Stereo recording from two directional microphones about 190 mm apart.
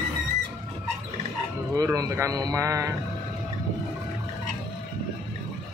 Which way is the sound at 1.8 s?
15° right (ahead or behind).